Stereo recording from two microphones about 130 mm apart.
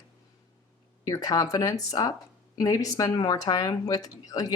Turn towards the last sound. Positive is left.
turn(degrees=30)  # may be behind; listen again after turning